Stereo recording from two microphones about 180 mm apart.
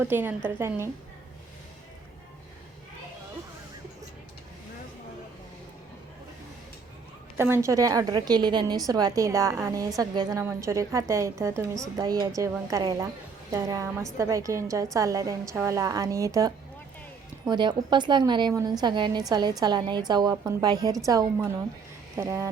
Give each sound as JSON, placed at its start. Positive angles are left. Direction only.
{"t": 0.0, "sound": "a woman's voice", "side_deg": -10}
{"t": 7.3, "sound": "a woman's voice", "side_deg": -15}